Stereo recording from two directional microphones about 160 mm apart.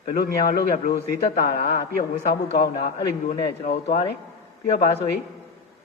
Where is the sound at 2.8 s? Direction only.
40° left (ahead or behind).